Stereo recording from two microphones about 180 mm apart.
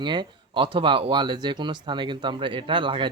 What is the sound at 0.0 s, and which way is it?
Speech, 25° right (ahead or behind).